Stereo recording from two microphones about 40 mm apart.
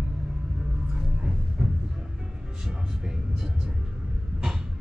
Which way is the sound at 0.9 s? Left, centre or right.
Centre.